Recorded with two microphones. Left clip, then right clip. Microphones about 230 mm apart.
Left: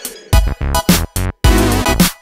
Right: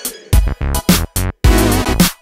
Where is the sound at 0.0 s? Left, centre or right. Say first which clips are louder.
Left 3 dB; centre.